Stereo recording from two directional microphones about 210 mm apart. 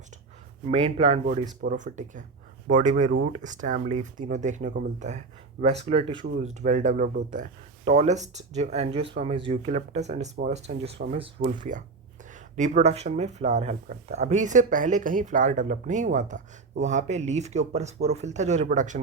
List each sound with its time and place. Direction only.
0.6 s speech: 25° right (ahead or behind)
1.2 s speech: 40° right (ahead or behind)
11.3 s speech: 40° right (ahead or behind)